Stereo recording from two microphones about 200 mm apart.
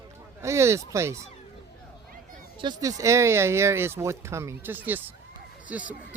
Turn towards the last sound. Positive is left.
turn(degrees=-5)  # may be behind; listen again after turning